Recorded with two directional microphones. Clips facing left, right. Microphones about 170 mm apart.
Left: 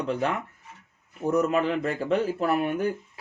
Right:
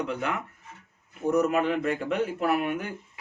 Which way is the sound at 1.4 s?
30° left (ahead or behind).